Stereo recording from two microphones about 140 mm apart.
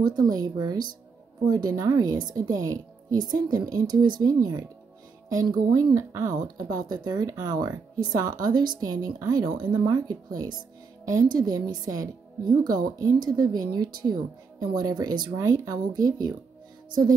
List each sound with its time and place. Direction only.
0.1 s speech: 30° right (ahead or behind)